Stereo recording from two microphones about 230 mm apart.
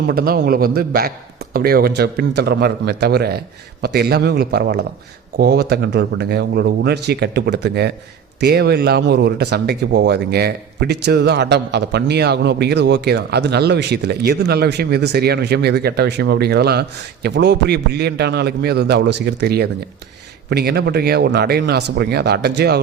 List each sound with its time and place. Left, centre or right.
0.1 s a man's voice: right